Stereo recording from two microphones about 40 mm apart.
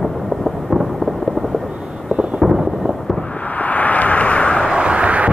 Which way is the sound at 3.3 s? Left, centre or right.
Left.